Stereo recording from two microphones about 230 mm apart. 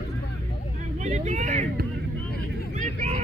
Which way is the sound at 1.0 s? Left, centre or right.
Right.